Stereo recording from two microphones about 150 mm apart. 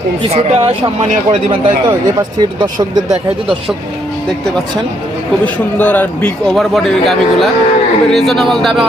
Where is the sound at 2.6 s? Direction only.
25° right (ahead or behind).